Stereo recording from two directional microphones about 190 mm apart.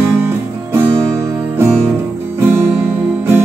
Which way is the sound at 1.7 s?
10° right (ahead or behind).